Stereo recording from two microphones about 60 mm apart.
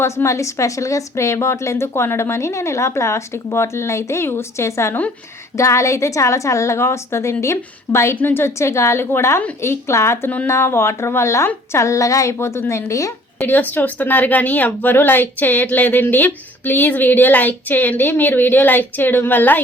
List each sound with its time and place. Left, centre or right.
0.0 s a woman's voice: left
8.1 s a woman's voice: left
13.4 s speech: left